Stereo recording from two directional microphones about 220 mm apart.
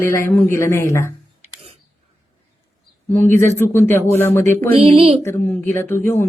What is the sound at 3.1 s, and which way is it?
Speech, 10° left (ahead or behind).